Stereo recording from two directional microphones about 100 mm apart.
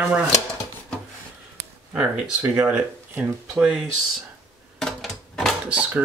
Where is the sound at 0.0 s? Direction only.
5° right (ahead or behind).